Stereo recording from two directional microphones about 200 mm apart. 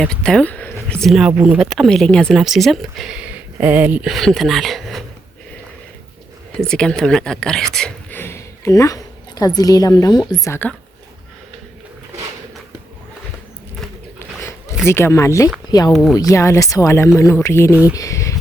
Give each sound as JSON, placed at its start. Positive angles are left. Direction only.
{"t": 0.0, "sound": "speech", "side_deg": 5}
{"t": 6.6, "sound": "speech", "side_deg": 5}
{"t": 14.8, "sound": "speech", "side_deg": 15}
{"t": 15.9, "sound": "speech", "side_deg": 0}
{"t": 16.1, "sound": "speech", "side_deg": 15}
{"t": 17.7, "sound": "speech", "side_deg": -10}
{"t": 17.9, "sound": "a sound", "side_deg": 15}